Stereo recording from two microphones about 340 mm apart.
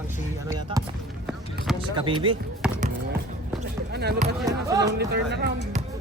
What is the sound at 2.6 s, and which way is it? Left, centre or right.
Basketball bounce, centre.